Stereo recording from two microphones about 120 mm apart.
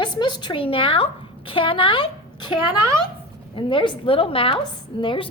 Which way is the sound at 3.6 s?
40° left (ahead or behind).